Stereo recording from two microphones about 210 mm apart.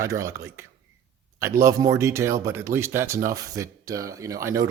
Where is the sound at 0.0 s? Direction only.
15° right (ahead or behind).